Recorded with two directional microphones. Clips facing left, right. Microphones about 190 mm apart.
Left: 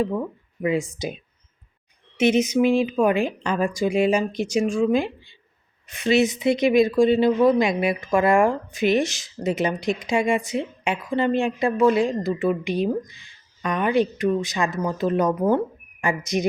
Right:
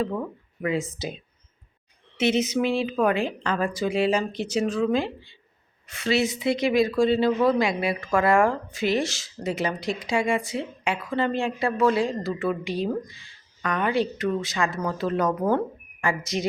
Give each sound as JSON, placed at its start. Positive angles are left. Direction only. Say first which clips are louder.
{"t": 0.6, "sound": "speech", "louder": "left 3 dB", "side_deg": 15}